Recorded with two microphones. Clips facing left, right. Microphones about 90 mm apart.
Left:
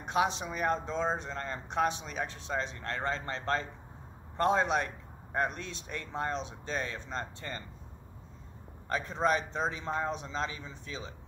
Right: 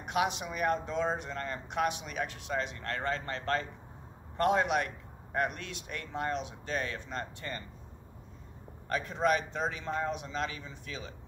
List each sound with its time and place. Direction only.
0.0 s speech: 30° left (ahead or behind)
8.8 s speech: 30° left (ahead or behind)